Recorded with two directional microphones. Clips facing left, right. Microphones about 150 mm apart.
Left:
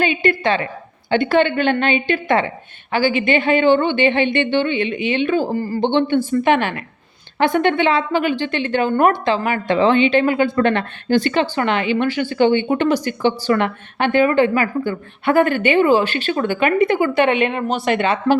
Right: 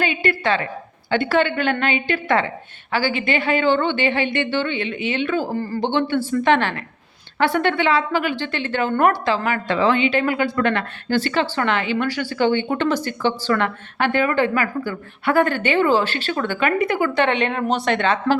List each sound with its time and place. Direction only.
0.0 s a woman's voice: 20° left (ahead or behind)
5.8 s a woman's voice: 25° left (ahead or behind)
17.2 s a woman's voice: 10° left (ahead or behind)